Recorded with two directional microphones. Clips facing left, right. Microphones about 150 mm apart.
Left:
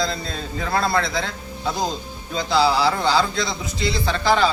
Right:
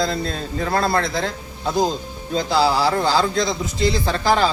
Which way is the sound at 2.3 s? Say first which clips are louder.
Right 1 dB; 40° right (ahead or behind).